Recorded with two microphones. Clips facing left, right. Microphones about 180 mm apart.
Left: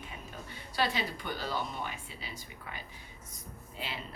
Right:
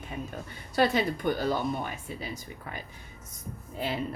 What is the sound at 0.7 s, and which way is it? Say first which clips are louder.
Speech: right 8 dB; 50° right (ahead or behind).